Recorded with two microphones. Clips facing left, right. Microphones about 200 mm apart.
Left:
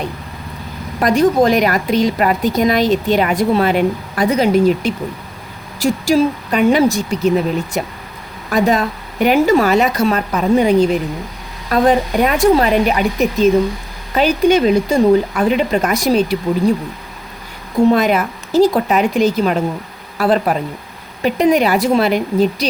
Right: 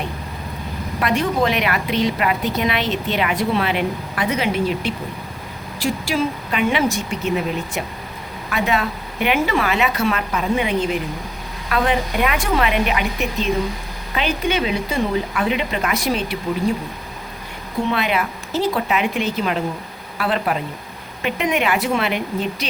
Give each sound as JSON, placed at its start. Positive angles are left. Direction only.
{"t": 0.9, "sound": "a woman's voice", "side_deg": 40}
{"t": 17.8, "sound": "a woman's voice", "side_deg": 45}